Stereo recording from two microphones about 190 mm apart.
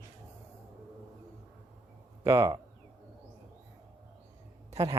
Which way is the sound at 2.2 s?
15° right (ahead or behind).